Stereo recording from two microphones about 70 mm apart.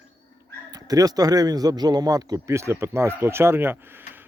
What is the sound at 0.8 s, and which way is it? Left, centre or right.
A man's voice, right.